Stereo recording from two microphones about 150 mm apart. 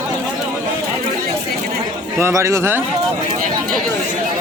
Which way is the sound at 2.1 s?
20° right (ahead or behind).